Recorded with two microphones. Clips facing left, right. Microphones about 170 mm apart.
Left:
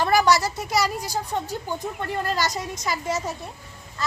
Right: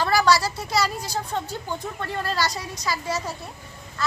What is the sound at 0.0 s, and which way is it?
A woman's voice, 20° left (ahead or behind).